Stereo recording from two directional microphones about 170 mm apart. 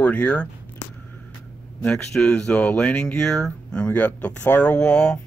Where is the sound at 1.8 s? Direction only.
5° left (ahead or behind).